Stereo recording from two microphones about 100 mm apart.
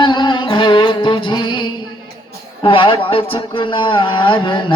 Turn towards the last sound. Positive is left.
turn(degrees=55)  # may be behind; listen again after turning